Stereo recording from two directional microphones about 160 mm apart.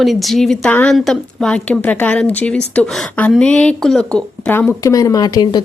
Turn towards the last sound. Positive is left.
turn(degrees=25)  # may be behind; listen again after turning